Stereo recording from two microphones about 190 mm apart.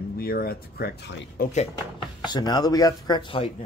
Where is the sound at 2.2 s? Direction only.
20° left (ahead or behind).